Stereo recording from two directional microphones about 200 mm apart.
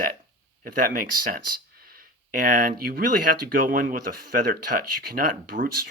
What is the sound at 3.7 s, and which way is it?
Speech, 45° right (ahead or behind).